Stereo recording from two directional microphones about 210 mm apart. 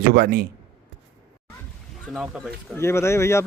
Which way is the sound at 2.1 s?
Centre (ahead or behind).